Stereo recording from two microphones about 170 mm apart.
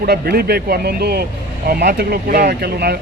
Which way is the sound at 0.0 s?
65° right (ahead or behind).